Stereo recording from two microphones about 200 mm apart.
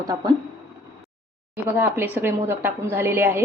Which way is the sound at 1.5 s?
10° right (ahead or behind).